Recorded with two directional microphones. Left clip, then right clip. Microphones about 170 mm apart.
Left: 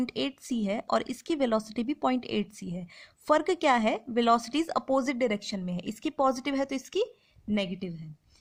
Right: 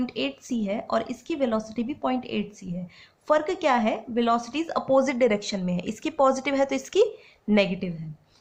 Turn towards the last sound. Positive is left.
turn(degrees=30)  # may be behind; listen again after turning